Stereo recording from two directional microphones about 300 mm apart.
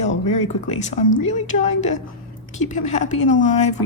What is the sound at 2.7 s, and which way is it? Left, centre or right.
Speech, left.